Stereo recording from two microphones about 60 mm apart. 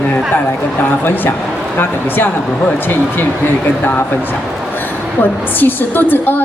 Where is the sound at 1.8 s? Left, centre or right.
Left.